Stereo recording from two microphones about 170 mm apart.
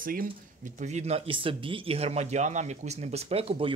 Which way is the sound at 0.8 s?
40° right (ahead or behind).